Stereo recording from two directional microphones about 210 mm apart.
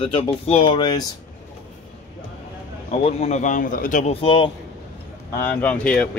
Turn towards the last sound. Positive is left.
turn(degrees=5)  # may be behind; listen again after turning